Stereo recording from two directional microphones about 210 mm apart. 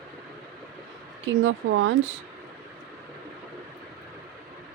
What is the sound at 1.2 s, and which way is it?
Speech, 65° right (ahead or behind).